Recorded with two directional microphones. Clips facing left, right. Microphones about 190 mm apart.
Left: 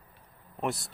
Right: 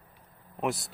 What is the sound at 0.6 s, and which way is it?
Speech, centre (ahead or behind).